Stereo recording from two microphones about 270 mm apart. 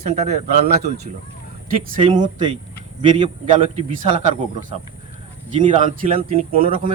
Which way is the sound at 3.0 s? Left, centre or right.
Centre.